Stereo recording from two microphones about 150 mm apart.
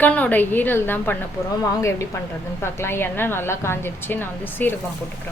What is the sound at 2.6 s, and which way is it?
A woman's voice, 15° left (ahead or behind).